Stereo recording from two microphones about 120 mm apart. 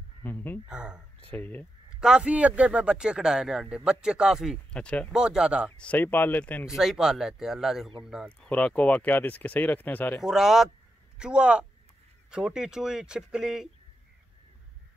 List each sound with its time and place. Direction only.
0.2 s speech: 15° left (ahead or behind)
0.7 s speech: 10° right (ahead or behind)
1.3 s speech: 15° left (ahead or behind)
2.0 s speech: 5° right (ahead or behind)
4.7 s speech: 10° left (ahead or behind)
5.1 s speech: 5° right (ahead or behind)
5.8 s speech: 15° left (ahead or behind)
6.7 s speech: 5° right (ahead or behind)
8.4 s speech: 10° left (ahead or behind)
10.2 s speech: 5° right (ahead or behind)